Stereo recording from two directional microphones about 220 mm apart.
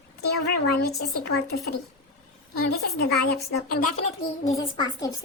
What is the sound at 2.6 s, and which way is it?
Speech, 45° left (ahead or behind).